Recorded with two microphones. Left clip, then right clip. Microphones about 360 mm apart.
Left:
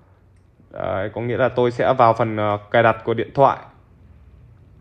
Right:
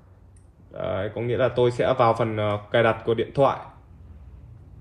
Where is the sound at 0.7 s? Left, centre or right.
Left.